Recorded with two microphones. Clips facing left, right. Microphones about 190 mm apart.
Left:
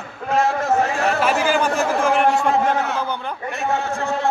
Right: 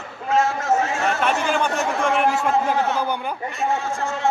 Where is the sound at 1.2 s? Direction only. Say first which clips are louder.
Left 3 dB; 5° left (ahead or behind).